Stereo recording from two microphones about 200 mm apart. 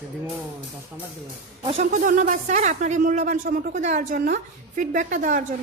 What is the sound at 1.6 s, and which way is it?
A woman's voice, 35° right (ahead or behind).